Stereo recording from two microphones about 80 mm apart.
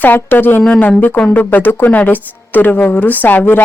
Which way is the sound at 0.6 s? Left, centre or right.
Centre.